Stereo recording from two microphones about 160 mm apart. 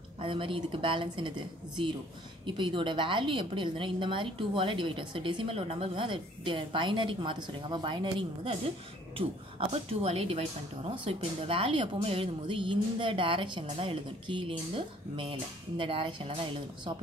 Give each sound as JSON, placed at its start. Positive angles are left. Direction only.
{"t": 0.2, "sound": "a woman's voice", "side_deg": -35}
{"t": 2.4, "sound": "a woman's voice", "side_deg": -30}